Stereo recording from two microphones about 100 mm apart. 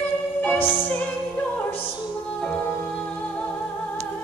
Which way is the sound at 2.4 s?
15° left (ahead or behind).